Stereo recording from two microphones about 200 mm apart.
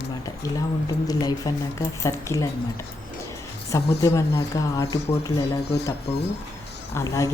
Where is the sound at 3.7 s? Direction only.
15° left (ahead or behind).